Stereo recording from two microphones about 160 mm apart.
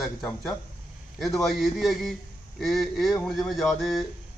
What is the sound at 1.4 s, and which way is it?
A man's voice, centre (ahead or behind).